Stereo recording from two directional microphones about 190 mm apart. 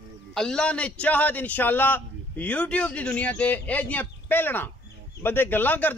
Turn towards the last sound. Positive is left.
turn(degrees=10)  # may be behind; listen again after turning